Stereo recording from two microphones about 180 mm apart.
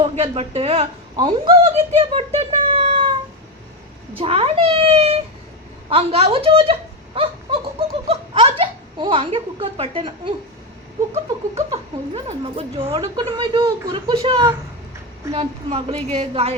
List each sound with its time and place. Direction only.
0.0 s speech: 35° right (ahead or behind)
4.2 s speech: 35° right (ahead or behind)